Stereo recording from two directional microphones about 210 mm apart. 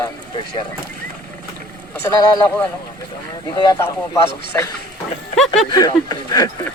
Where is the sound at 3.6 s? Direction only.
15° left (ahead or behind).